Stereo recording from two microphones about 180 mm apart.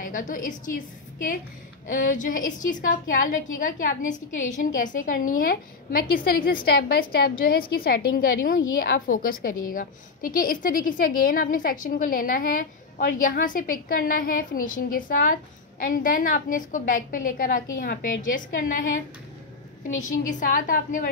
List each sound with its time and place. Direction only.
0.0 s a woman's voice: 45° left (ahead or behind)
9.0 s a woman's voice: 50° left (ahead or behind)